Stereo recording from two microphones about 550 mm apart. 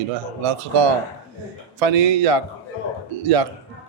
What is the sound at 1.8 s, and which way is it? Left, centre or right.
Speech, right.